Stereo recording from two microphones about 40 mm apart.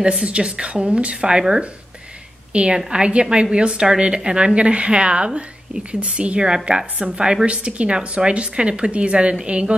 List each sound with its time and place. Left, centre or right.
0.0 s a woman's voice: right
2.5 s a woman's voice: right